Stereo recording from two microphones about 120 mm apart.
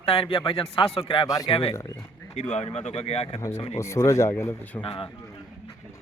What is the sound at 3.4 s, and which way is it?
Speech, 25° left (ahead or behind).